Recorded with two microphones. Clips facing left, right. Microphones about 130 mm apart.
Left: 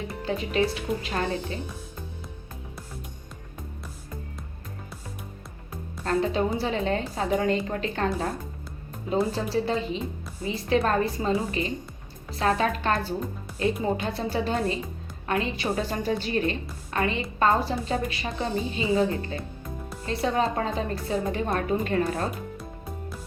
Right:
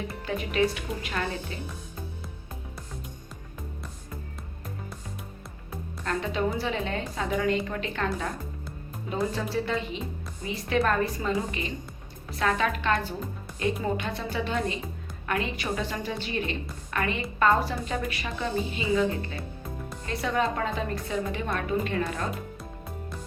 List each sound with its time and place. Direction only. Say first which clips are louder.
0.3 s a woman's voice: left 1 dB; 30° left (ahead or behind)
6.1 s a woman's voice: left 4 dB; 35° left (ahead or behind)
9.3 s a woman's voice: left 3 dB; 30° left (ahead or behind)
16.9 s a woman's voice: left 3 dB; 30° left (ahead or behind)